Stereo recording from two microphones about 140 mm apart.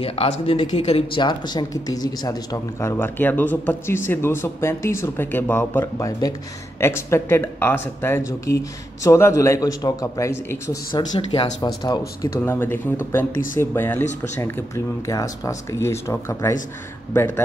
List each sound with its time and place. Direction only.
0.0 s speech: 45° left (ahead or behind); by 10.8 s 20° left (ahead or behind)
11.1 s speech: 45° left (ahead or behind)
11.6 s speech: 30° left (ahead or behind)
12.2 s speech: 15° left (ahead or behind)
15.0 s speech: 25° left (ahead or behind)